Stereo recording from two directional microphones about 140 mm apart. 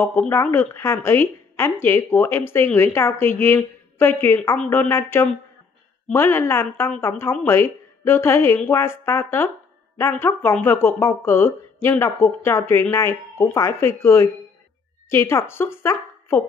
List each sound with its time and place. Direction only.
0.0 s a woman's voice: 15° left (ahead or behind)